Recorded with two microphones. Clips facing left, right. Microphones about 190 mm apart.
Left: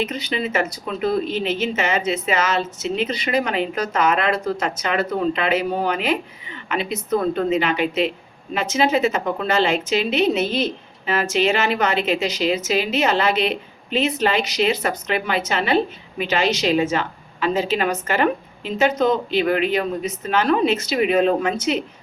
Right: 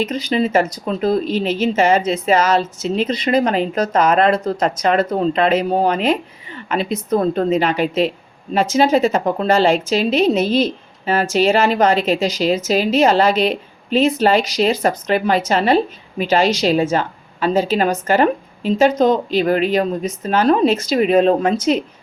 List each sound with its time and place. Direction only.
0.0 s speech: 35° right (ahead or behind)